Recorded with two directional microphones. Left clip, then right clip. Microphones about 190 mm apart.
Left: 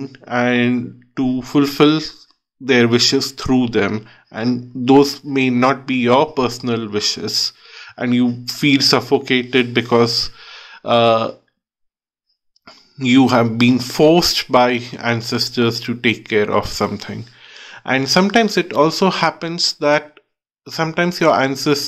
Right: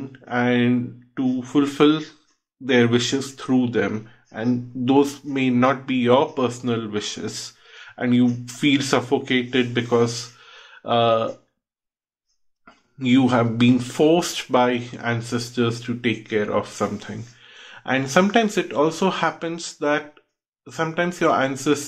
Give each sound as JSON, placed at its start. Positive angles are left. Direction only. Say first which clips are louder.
{"t": 0.0, "sound": "speech", "louder": "left 5 dB", "side_deg": 30}
{"t": 12.6, "sound": "speech", "louder": "left 5 dB", "side_deg": 35}